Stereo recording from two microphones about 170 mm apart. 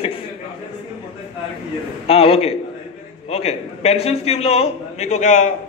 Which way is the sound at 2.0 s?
35° left (ahead or behind).